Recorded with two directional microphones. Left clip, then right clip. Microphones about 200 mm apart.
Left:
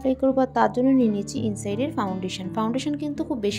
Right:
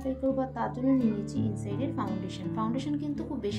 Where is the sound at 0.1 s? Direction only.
45° left (ahead or behind).